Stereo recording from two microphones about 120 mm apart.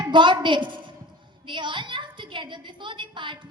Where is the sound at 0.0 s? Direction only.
40° right (ahead or behind).